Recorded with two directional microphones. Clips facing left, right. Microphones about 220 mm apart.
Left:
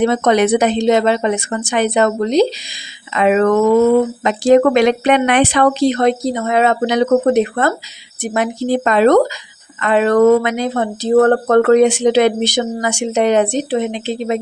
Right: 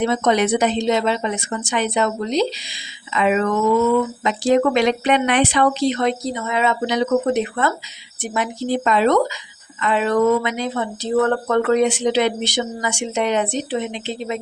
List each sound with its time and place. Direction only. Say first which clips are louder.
0.0 s speech: left 5 dB; 55° left (ahead or behind)
8.3 s speech: left 5 dB; 55° left (ahead or behind)